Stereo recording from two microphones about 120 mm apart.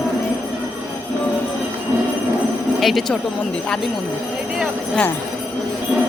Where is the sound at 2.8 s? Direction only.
Centre (ahead or behind).